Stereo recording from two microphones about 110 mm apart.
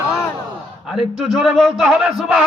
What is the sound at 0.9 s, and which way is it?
A man's voice, centre (ahead or behind).